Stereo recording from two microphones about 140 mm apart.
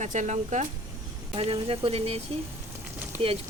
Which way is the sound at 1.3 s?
45° right (ahead or behind).